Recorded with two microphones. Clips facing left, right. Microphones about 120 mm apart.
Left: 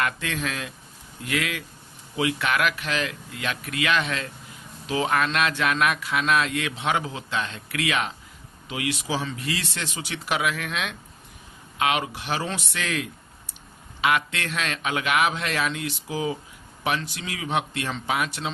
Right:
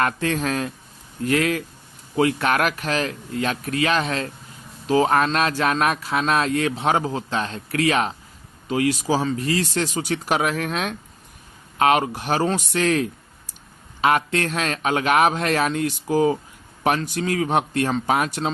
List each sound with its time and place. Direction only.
0.0 s speech: 40° right (ahead or behind)